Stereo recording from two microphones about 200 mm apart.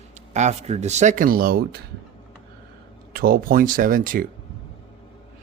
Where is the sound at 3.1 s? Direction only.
45° right (ahead or behind).